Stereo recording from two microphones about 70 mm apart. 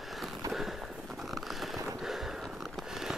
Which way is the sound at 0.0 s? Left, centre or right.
Centre.